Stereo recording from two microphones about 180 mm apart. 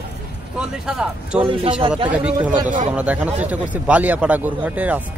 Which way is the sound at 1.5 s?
30° right (ahead or behind).